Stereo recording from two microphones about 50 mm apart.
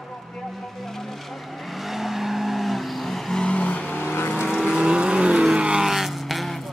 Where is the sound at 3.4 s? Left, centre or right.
Centre.